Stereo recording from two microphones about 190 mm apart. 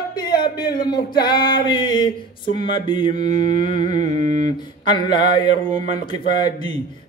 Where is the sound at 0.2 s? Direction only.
20° left (ahead or behind).